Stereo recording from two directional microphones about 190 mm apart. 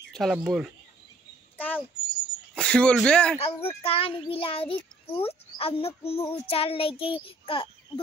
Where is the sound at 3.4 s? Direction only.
30° left (ahead or behind).